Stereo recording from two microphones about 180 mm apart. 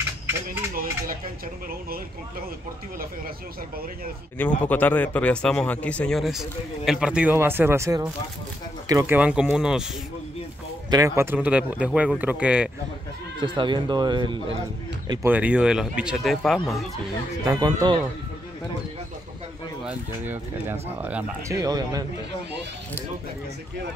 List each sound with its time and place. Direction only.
4.4 s a man's voice: 10° left (ahead or behind)
10.9 s speech: 20° right (ahead or behind)
13.4 s speech: 25° right (ahead or behind)
15.2 s a man's voice: 10° right (ahead or behind)
17.5 s speech: 20° right (ahead or behind)
19.8 s speech: 10° right (ahead or behind)
21.5 s speech: 20° right (ahead or behind)